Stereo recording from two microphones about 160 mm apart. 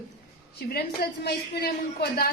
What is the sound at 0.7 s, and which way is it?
A woman's voice, 85° left.